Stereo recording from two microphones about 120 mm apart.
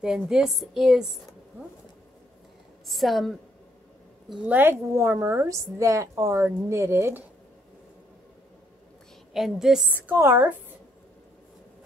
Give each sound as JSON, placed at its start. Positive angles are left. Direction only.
{"t": 0.0, "sound": "a woman's voice", "side_deg": -5}
{"t": 2.9, "sound": "a woman's voice", "side_deg": 0}
{"t": 4.3, "sound": "a woman's voice", "side_deg": -15}
{"t": 9.3, "sound": "a woman's voice", "side_deg": -5}